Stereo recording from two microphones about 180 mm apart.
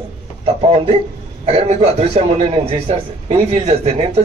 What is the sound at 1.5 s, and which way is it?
Speech, 35° right (ahead or behind).